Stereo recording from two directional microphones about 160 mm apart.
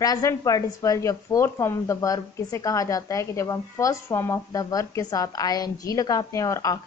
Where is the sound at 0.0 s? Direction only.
20° left (ahead or behind).